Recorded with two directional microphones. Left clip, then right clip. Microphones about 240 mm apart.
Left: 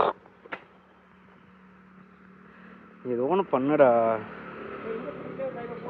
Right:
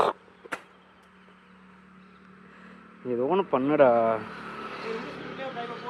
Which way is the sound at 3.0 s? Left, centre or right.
Right.